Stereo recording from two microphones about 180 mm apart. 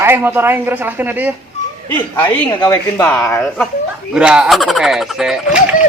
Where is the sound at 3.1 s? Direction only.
5° left (ahead or behind).